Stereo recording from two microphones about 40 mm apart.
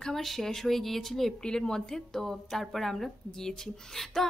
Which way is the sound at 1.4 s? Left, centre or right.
Centre.